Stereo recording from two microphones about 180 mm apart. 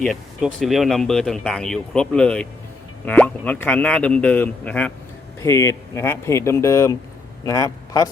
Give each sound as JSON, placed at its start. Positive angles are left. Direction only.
{"t": 0.0, "sound": "a man's voice", "side_deg": 0}